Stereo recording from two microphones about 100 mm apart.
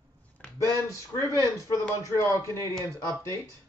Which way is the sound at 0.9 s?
30° left (ahead or behind).